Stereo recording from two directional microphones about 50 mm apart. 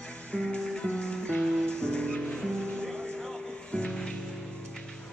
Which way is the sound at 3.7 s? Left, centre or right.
Left.